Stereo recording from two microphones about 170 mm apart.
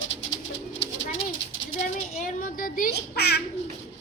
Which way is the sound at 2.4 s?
55° left (ahead or behind).